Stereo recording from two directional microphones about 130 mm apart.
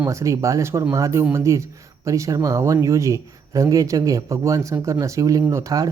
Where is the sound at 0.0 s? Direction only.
25° right (ahead or behind).